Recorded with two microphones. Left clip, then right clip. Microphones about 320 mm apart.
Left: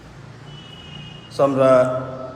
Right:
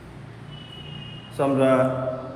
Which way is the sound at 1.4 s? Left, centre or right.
Centre.